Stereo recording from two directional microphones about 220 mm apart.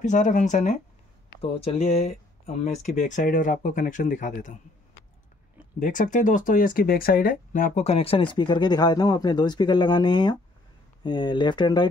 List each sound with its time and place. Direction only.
0.0 s speech: 35° left (ahead or behind)
5.8 s speech: 35° left (ahead or behind); by 11.9 s 20° left (ahead or behind)